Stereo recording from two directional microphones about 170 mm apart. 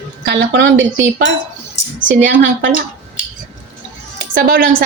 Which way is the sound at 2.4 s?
90° right.